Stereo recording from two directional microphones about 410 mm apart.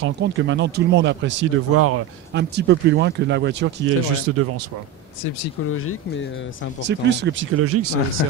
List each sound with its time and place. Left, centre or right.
0.0 s speech: right
5.7 s speech: left
6.9 s speech: right
8.2 s speech: left